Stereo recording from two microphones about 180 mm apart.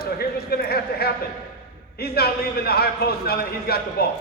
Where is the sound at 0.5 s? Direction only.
60° left (ahead or behind).